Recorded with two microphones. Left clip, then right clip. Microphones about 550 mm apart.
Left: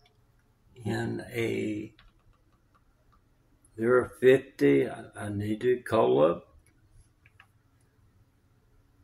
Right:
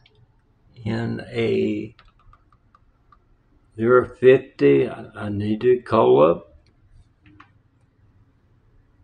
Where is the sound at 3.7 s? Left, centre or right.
Left.